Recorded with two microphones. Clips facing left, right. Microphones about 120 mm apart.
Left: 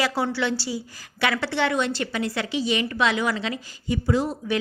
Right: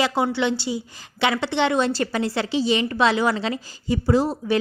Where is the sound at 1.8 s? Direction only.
35° right (ahead or behind).